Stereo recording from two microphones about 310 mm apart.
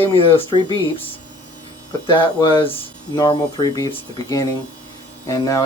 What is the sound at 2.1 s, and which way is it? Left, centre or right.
Speech, centre.